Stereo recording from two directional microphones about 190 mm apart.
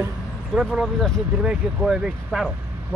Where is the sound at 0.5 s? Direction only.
Centre (ahead or behind).